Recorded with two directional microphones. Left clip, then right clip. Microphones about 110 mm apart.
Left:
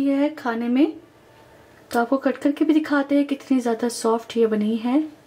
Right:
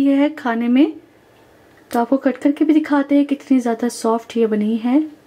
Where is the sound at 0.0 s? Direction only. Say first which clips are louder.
Right 5 dB; 30° right (ahead or behind).